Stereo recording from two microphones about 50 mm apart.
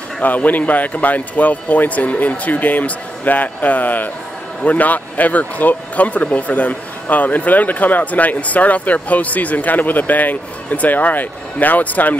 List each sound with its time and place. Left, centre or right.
0.2 s speech: left